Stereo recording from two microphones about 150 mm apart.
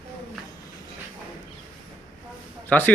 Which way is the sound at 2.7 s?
10° left (ahead or behind).